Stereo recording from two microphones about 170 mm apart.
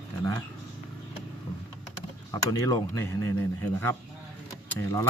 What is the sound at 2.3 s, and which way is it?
Speech, 20° left (ahead or behind).